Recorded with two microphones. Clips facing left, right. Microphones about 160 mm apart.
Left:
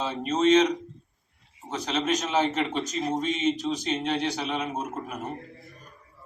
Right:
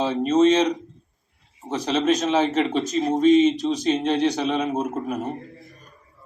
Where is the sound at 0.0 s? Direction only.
35° right (ahead or behind).